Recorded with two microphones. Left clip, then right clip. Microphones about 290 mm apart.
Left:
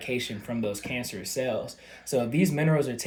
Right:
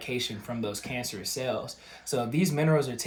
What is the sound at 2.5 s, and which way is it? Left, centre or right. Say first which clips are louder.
Speech: right 3 dB; centre.